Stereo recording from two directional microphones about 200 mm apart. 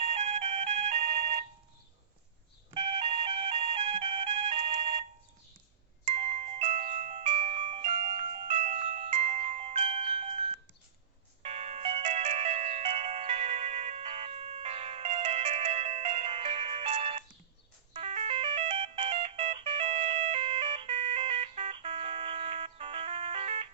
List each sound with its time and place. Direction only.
0.0 s ringtone: 35° right (ahead or behind)
2.7 s music: 30° right (ahead or behind)
6.1 s glockenspiel: 30° right (ahead or behind)
11.4 s music: 30° right (ahead or behind)
17.9 s ringtone: 30° right (ahead or behind)